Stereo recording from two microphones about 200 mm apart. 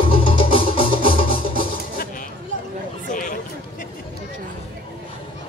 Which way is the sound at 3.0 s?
40° left (ahead or behind).